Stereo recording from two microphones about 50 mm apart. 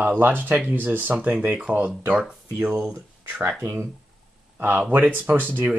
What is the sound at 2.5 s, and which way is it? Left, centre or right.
Speech, right.